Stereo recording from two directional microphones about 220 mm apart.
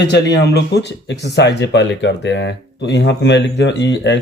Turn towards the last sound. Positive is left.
turn(degrees=55)  # may be behind; listen again after turning